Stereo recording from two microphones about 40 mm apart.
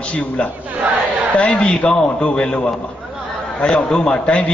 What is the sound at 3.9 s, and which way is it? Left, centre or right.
Speech, centre.